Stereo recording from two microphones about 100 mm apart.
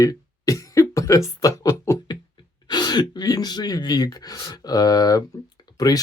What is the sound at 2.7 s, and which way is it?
Speech, 45° left (ahead or behind).